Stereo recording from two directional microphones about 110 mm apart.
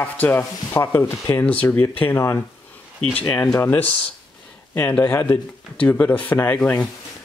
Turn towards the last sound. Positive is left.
turn(degrees=10)  # may be behind; listen again after turning